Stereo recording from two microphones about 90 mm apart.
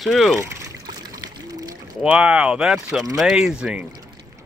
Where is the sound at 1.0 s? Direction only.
40° right (ahead or behind).